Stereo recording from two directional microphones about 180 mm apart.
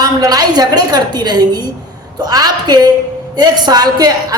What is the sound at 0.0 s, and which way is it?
A woman's voice, 20° right (ahead or behind).